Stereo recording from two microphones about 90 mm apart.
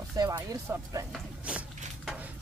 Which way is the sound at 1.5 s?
10° right (ahead or behind).